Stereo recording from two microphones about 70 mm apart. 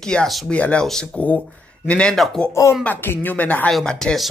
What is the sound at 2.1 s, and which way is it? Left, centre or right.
Speech, centre.